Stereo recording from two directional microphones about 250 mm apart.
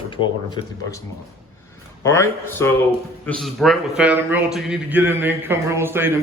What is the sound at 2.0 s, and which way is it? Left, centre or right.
Speech, centre.